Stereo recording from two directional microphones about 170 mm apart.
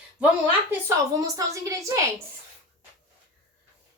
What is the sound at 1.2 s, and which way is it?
Speech, 20° right (ahead or behind).